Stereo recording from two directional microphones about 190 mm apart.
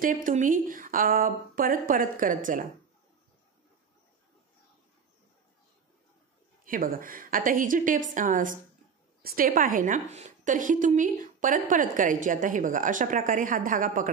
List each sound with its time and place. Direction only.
0.0 s a woman's voice: 45° right (ahead or behind)
6.6 s a woman's voice: 50° right (ahead or behind)